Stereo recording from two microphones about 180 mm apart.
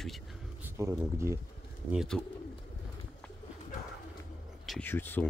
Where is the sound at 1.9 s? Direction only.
Centre (ahead or behind).